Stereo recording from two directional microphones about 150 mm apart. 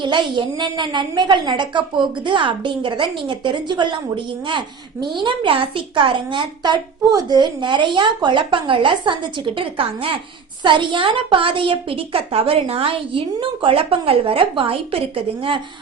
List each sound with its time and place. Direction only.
0.0 s a woman's voice: 30° right (ahead or behind)